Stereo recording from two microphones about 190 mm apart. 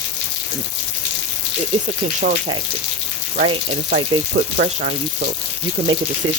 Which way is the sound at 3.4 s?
30° right (ahead or behind).